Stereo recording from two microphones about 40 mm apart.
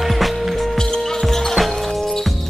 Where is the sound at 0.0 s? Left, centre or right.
Centre.